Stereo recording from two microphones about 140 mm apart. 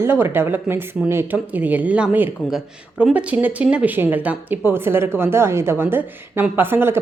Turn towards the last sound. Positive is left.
turn(degrees=-15)  # may be behind; listen again after turning